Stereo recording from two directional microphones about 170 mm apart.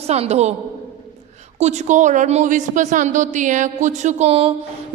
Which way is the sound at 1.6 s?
45° right (ahead or behind).